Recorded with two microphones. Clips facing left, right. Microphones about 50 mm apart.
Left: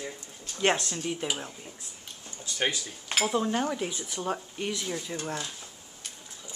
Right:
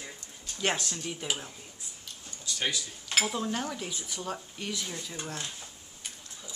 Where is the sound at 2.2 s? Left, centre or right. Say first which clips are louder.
Left 3 dB; left.